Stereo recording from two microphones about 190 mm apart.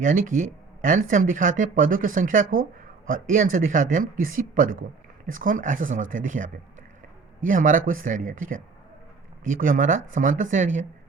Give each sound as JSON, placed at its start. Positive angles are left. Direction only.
{"t": 0.0, "sound": "speech", "side_deg": -45}